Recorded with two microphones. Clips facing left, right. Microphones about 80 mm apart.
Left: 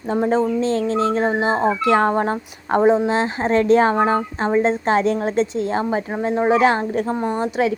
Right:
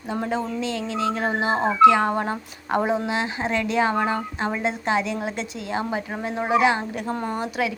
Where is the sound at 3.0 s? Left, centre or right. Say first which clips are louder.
Left 6 dB; left.